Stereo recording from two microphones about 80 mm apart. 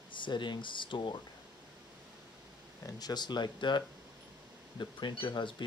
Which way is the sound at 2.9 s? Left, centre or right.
Left.